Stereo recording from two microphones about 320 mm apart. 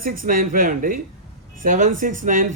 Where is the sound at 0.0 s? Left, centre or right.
Right.